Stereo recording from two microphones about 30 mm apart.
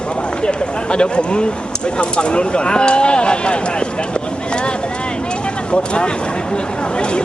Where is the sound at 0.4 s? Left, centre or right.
Left.